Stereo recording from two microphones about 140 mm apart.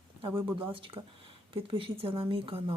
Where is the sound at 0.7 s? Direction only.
40° right (ahead or behind).